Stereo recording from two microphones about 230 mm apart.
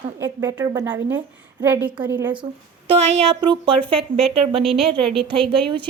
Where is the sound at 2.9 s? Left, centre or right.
Right.